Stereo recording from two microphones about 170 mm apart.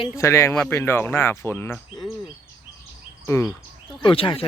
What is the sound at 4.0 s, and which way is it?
Speech, 30° left (ahead or behind).